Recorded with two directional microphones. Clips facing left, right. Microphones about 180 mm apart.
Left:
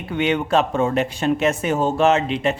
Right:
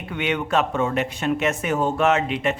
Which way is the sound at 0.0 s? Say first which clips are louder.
Left 4 dB; 30° left (ahead or behind).